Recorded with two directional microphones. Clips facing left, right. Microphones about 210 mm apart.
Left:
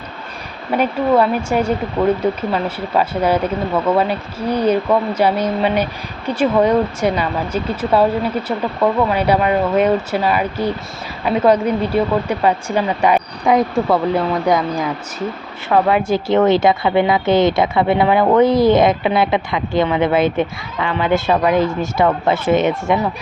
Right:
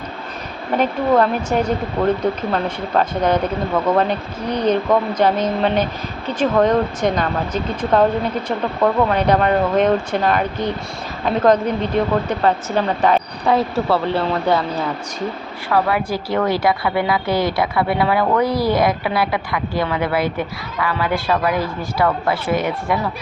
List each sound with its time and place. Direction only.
0.8 s speech: 10° left (ahead or behind)
15.7 s a woman's voice: 25° left (ahead or behind)